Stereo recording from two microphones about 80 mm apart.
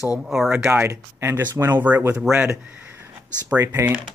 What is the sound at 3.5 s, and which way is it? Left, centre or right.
Speech, right.